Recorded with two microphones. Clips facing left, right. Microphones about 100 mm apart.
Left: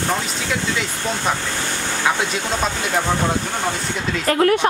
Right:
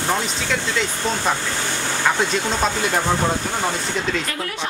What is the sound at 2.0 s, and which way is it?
Speech, 5° left (ahead or behind).